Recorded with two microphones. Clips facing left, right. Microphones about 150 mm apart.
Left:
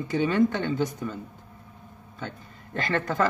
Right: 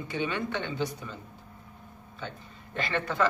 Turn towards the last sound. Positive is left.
turn(degrees=45)  # may be behind; listen again after turning